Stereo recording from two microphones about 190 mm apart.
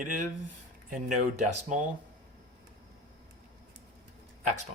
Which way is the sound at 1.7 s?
40° right (ahead or behind).